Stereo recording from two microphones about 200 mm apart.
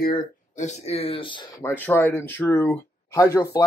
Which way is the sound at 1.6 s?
10° left (ahead or behind).